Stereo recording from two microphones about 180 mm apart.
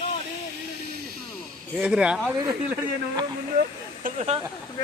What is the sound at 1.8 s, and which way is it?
Speech, 5° right (ahead or behind).